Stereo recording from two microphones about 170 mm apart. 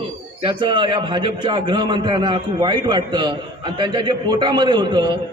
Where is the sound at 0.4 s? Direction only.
30° right (ahead or behind).